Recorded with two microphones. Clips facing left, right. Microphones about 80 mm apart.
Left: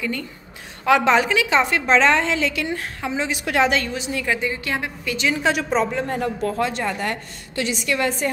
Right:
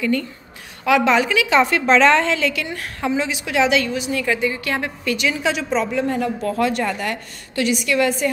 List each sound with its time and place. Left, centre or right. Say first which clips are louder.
0.8 s a woman's voice: even; left
3.3 s a woman's voice: left 3 dB; left
4.1 s a woman's voice: right 2 dB; centre
5.1 s a woman's voice: even; left
5.5 s a woman's voice: even; left
6.6 s a woman's voice: right 5 dB; left